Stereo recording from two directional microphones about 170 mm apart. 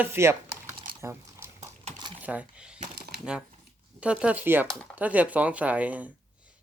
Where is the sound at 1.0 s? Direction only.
15° right (ahead or behind).